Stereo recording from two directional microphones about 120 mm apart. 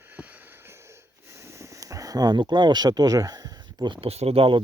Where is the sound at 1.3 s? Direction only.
25° right (ahead or behind); by 4.1 s 40° right (ahead or behind).